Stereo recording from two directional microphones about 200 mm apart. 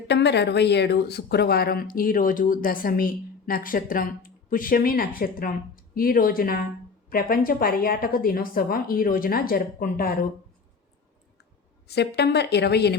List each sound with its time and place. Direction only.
0.1 s speech: 60° left (ahead or behind)
11.9 s a woman's voice: 55° left (ahead or behind)